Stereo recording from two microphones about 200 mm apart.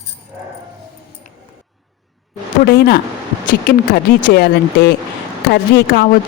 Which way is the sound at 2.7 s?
50° left (ahead or behind).